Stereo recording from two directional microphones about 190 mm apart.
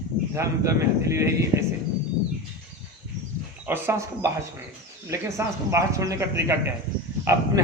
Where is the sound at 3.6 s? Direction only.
10° right (ahead or behind).